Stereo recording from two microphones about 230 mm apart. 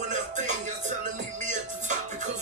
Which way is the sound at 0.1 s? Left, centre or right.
Right.